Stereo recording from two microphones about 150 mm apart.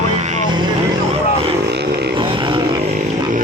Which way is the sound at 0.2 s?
50° right (ahead or behind).